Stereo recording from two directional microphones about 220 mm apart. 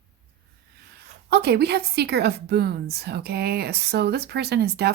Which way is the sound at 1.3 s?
45° right (ahead or behind).